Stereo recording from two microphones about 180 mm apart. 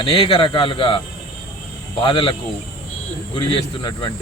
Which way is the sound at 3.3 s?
25° left (ahead or behind).